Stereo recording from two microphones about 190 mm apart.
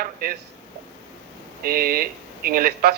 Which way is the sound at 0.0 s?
50° right (ahead or behind).